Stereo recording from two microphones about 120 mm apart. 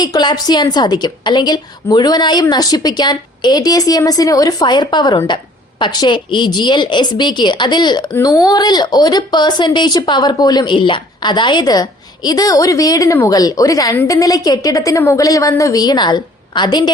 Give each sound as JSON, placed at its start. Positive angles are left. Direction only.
{"t": 0.0, "sound": "a woman's voice", "side_deg": 35}
{"t": 13.9, "sound": "speech", "side_deg": 20}
{"t": 14.2, "sound": "a woman's voice", "side_deg": 30}